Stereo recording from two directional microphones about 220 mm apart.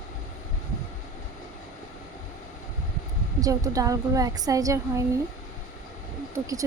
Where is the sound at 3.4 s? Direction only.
15° right (ahead or behind).